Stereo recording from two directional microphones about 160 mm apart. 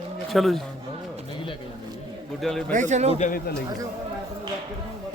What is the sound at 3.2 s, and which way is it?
Speech, 60° left (ahead or behind).